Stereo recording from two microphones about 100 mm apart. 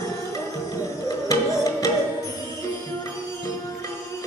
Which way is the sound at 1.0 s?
35° left (ahead or behind).